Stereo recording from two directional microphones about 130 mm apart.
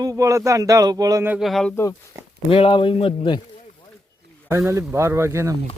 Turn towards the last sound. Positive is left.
turn(degrees=-20)  # may be behind; listen again after turning